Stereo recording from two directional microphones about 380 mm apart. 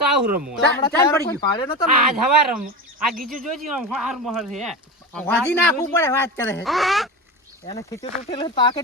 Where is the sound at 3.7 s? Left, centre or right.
Centre.